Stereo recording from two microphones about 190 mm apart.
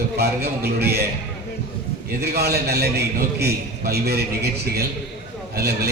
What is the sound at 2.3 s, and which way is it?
A man's voice, 55° right (ahead or behind).